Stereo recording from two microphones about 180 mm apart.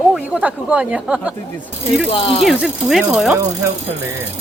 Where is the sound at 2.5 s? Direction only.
Centre (ahead or behind).